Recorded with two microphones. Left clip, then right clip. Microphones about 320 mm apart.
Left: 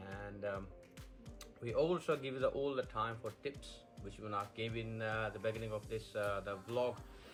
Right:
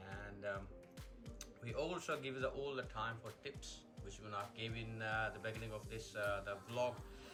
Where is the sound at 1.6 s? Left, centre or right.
Centre.